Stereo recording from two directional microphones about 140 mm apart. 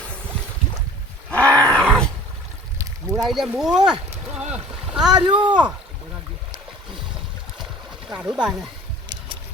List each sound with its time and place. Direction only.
1.3 s roar: 10° left (ahead or behind)
3.1 s speech: centre (ahead or behind)
4.1 s boat: 10° right (ahead or behind)
5.2 s speech: 35° right (ahead or behind)
8.1 s speech: 5° right (ahead or behind)